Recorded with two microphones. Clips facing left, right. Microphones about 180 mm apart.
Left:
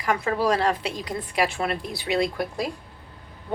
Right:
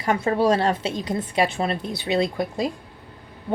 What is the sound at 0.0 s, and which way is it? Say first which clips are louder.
A woman's voice: right 3 dB; 25° right (ahead or behind).